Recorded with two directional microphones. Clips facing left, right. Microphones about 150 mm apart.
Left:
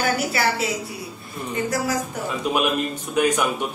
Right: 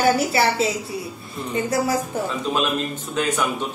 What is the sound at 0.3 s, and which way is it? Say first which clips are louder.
Speech: right 3 dB; 25° right (ahead or behind).